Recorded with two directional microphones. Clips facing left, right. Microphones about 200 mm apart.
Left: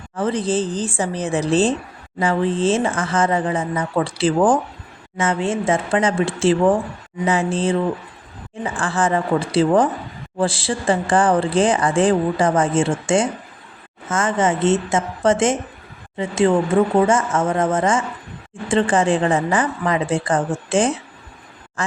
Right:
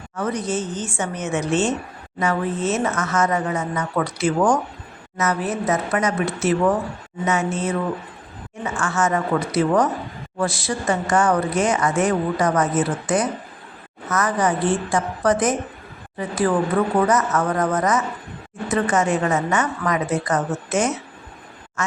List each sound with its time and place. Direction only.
0.2 s speech: 30° left (ahead or behind)